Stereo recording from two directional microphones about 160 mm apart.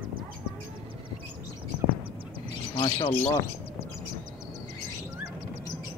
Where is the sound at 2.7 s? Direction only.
30° left (ahead or behind).